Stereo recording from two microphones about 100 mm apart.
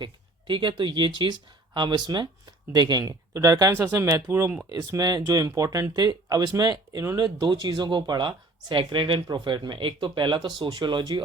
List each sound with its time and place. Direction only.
0.0 s speech: 55° right (ahead or behind)